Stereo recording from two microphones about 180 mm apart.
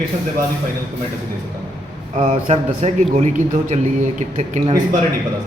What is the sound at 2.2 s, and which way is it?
Speech, 40° right (ahead or behind).